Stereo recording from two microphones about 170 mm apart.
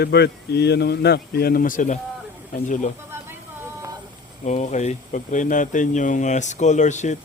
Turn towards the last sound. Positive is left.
turn(degrees=45)  # may be behind; listen again after turning